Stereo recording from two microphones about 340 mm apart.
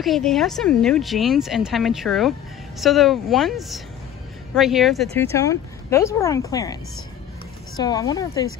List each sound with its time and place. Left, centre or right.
0.0 s speech: centre